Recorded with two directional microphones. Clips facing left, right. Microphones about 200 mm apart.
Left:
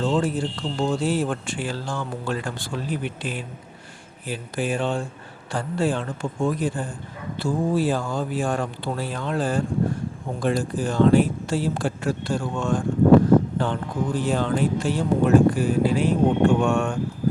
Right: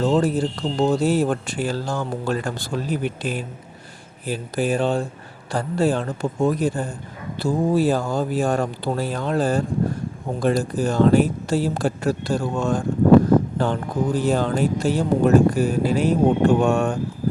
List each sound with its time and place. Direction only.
0.0 s speech: 40° right (ahead or behind)